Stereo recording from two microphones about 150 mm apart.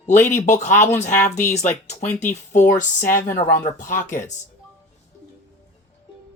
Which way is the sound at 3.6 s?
60° left (ahead or behind).